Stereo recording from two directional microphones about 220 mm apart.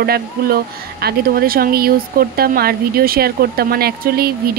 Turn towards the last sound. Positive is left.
turn(degrees=-45)  # may be behind; listen again after turning